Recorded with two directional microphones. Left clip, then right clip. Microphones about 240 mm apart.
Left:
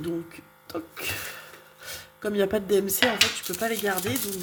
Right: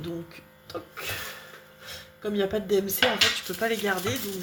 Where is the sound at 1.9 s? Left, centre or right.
Left.